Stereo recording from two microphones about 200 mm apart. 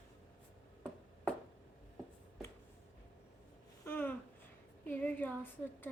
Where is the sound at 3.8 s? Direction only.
10° left (ahead or behind).